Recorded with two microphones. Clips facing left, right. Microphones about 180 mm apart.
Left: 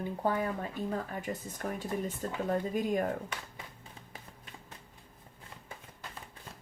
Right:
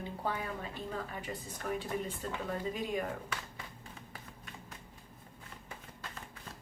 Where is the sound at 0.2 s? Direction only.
45° left (ahead or behind).